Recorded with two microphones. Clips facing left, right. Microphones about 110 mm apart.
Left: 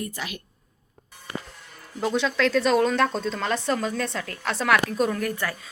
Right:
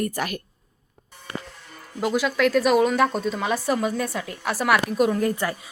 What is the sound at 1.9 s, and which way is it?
Speech, 5° right (ahead or behind).